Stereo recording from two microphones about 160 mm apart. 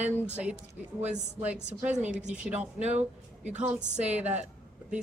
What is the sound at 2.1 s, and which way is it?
Speech, 50° right (ahead or behind).